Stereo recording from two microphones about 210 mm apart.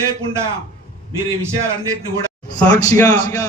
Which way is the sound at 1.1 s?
15° right (ahead or behind).